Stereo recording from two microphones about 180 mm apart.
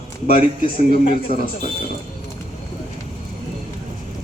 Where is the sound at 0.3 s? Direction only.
30° left (ahead or behind).